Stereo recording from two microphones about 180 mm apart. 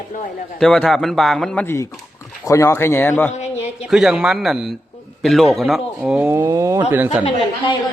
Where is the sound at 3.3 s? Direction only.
40° left (ahead or behind).